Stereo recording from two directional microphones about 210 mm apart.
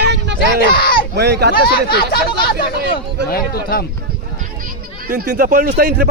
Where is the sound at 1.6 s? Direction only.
45° left (ahead or behind).